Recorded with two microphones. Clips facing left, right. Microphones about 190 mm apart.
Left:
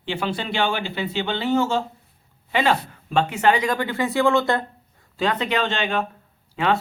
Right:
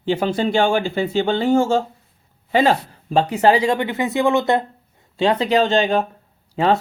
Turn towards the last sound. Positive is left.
turn(degrees=-35)  # may be behind; listen again after turning